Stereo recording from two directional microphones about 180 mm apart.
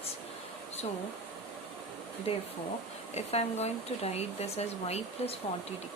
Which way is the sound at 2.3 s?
35° left (ahead or behind).